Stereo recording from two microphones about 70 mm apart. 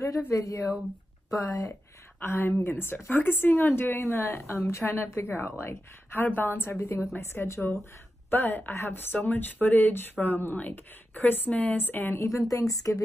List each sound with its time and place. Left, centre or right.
0.3 s a woman's voice: left
2.1 s a woman's voice: left
12.2 s a woman's voice: left